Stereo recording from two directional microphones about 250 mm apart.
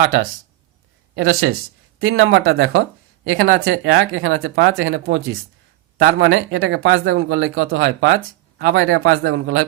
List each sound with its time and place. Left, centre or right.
0.0 s speech: right